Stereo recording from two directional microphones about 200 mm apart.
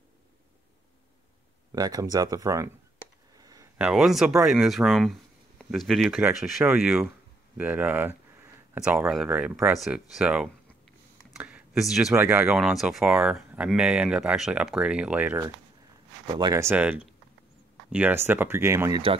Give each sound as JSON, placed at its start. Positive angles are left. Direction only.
{"t": 1.7, "sound": "speech", "side_deg": -20}
{"t": 3.3, "sound": "a sound", "side_deg": -20}
{"t": 3.7, "sound": "speech", "side_deg": -5}